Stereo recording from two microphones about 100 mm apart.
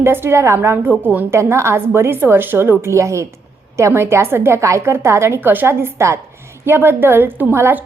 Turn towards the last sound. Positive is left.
turn(degrees=-20)  # may be behind; listen again after turning